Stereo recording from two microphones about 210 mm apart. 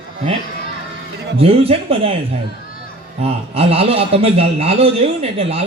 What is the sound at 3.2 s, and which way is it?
A man's voice, 30° right (ahead or behind).